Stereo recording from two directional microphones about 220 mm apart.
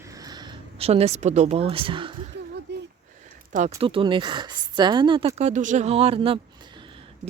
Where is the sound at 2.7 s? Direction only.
50° right (ahead or behind).